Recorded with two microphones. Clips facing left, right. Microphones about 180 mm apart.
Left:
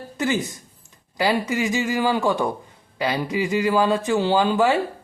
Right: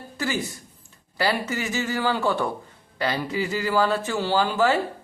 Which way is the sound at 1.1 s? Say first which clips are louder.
Left 3 dB; 15° left (ahead or behind).